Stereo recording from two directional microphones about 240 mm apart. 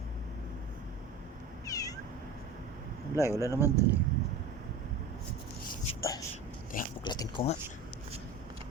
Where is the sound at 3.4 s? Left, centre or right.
Centre.